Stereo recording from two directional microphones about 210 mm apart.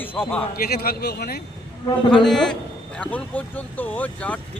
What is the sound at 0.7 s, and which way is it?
Speech, 50° left (ahead or behind).